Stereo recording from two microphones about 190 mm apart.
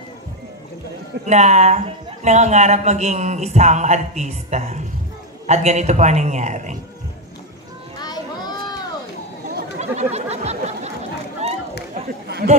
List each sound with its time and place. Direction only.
1.2 s speech: 35° right (ahead or behind)
8.0 s children playing: 20° left (ahead or behind)
9.8 s a sound: 35° right (ahead or behind)
11.4 s run: 35° right (ahead or behind)